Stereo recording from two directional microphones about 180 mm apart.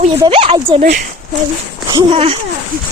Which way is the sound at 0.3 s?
30° right (ahead or behind).